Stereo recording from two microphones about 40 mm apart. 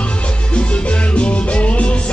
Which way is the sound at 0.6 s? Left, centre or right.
Left.